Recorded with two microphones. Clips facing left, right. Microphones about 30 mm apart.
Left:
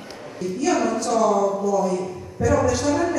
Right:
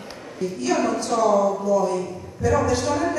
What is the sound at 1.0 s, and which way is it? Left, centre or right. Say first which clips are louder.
A man's voice: right 1 dB; right.